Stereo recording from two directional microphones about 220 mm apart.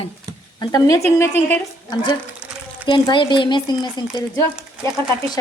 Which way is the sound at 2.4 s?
5° right (ahead or behind).